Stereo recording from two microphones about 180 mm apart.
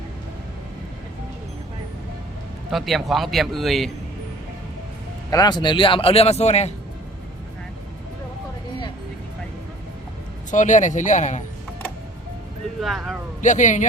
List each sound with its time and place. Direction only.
2.6 s a man's voice: centre (ahead or behind)
5.3 s speech: 20° left (ahead or behind)
10.5 s speech: 45° left (ahead or behind)
12.8 s a man's voice: centre (ahead or behind)
13.4 s speech: 45° left (ahead or behind)